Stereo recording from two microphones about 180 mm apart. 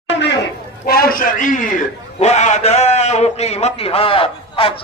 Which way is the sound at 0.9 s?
55° left (ahead or behind).